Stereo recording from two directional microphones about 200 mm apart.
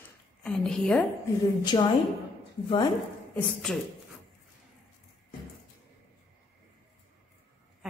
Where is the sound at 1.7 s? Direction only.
25° left (ahead or behind).